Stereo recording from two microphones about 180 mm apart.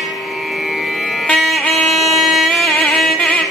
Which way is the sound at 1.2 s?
Centre (ahead or behind).